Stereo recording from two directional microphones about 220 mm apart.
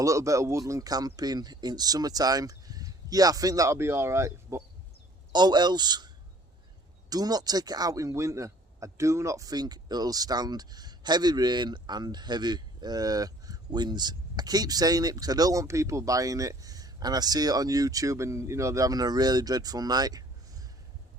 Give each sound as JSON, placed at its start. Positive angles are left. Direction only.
{"t": 0.0, "sound": "speech", "side_deg": -15}
{"t": 7.1, "sound": "speech", "side_deg": -15}